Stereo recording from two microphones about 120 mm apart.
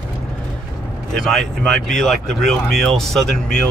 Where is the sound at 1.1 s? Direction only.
Centre (ahead or behind).